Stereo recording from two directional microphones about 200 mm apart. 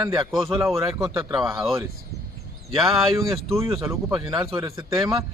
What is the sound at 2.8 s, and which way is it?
Speech, centre (ahead or behind).